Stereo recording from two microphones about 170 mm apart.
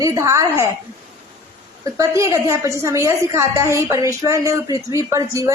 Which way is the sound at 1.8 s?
20° right (ahead or behind).